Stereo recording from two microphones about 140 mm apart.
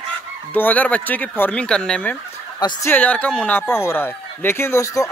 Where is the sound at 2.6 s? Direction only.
30° left (ahead or behind).